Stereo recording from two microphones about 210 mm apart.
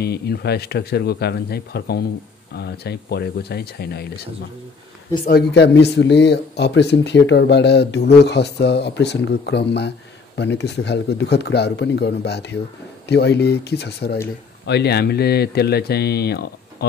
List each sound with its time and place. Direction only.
0.0 s speech: 50° left (ahead or behind)
5.3 s speech: 55° left (ahead or behind)